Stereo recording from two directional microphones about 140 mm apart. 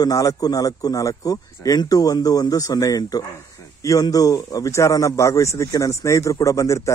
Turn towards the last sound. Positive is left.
turn(degrees=20)  # may be behind; listen again after turning